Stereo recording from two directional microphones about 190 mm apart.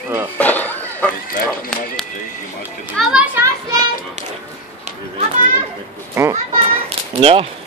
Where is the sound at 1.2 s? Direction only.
45° left (ahead or behind).